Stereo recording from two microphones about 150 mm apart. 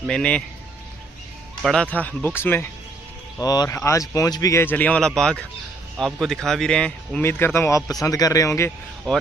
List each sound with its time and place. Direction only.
0.0 s speech: 5° left (ahead or behind)
1.6 s speech: 5° left (ahead or behind)